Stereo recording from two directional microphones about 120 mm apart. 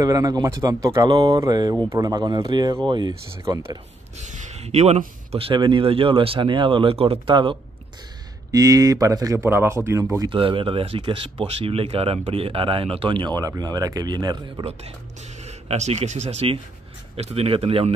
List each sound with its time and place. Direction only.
0.0 s speech: 30° right (ahead or behind)
3.4 s speech: 25° right (ahead or behind)
4.2 s speech: 85° right; by 7.5 s 45° right (ahead or behind)
8.5 s speech: 30° right (ahead or behind)
10.3 s speech: 45° right (ahead or behind)
15.4 s speech: 65° right (ahead or behind)
17.2 s speech: 60° right (ahead or behind)